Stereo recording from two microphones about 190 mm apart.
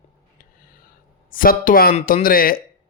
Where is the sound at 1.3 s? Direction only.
50° left (ahead or behind).